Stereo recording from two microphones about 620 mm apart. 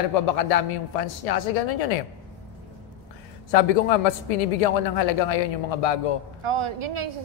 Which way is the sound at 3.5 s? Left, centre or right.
Left.